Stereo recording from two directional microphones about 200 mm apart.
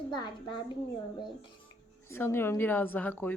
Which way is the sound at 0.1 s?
20° left (ahead or behind).